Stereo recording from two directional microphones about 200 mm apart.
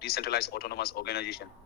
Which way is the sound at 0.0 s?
50° left (ahead or behind).